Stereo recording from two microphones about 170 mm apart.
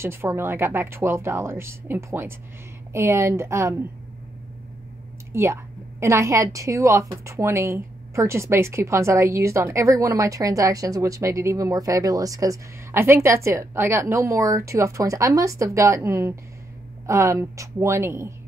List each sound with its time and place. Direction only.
0.0 s a woman's voice: 15° right (ahead or behind)
5.3 s a woman's voice: 15° right (ahead or behind)